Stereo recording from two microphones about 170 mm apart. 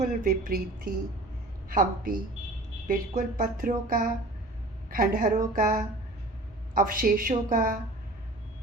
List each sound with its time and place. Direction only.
0.0 s speech: 50° right (ahead or behind)
1.7 s a woman's voice: 55° right (ahead or behind)